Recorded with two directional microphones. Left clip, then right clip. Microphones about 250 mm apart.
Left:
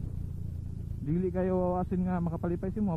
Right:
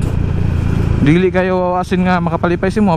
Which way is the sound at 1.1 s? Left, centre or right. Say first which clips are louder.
Right 14 dB; centre.